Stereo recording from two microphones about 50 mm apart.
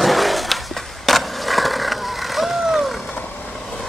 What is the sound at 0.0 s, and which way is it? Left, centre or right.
Skateboard, centre.